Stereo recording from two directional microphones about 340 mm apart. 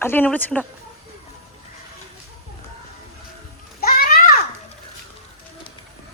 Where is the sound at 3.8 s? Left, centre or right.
Left.